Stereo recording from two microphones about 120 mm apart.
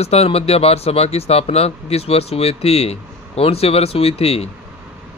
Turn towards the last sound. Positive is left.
turn(degrees=55)  # may be behind; listen again after turning